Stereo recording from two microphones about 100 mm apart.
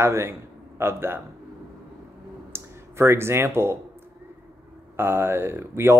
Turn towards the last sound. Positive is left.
turn(degrees=-25)  # may be behind; listen again after turning